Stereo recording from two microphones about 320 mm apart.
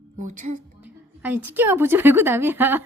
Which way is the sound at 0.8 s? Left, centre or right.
Centre.